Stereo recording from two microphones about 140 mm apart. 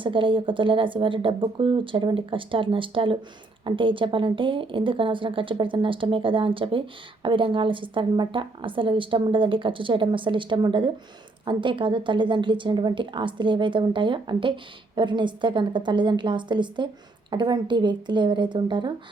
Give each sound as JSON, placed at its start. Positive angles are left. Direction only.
{"t": 0.0, "sound": "speech", "side_deg": -35}